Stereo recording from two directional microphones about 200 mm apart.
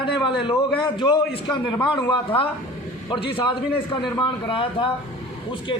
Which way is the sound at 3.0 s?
25° left (ahead or behind).